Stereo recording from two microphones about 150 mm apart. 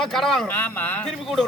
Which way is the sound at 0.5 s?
10° left (ahead or behind).